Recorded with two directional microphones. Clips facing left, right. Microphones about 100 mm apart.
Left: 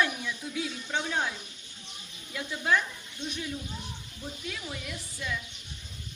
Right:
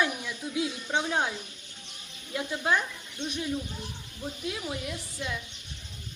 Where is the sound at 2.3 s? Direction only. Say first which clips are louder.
Right 1 dB; 20° right (ahead or behind).